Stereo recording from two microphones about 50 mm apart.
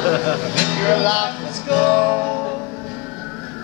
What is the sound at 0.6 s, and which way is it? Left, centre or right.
Music, right.